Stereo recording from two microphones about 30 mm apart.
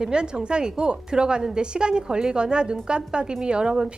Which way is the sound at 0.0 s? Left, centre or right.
Right.